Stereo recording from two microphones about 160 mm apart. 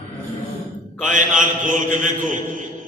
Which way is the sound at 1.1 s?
55° right (ahead or behind).